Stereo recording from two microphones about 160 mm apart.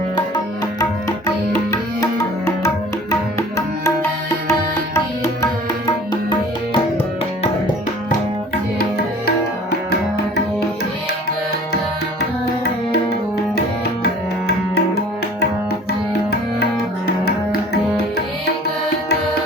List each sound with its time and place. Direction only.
4.9 s music: 20° left (ahead or behind)
14.0 s music: 75° left (ahead or behind)